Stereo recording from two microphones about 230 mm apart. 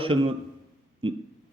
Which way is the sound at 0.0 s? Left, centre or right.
Right.